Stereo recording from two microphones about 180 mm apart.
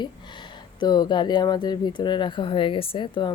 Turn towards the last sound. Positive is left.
turn(degrees=25)  # may be behind; listen again after turning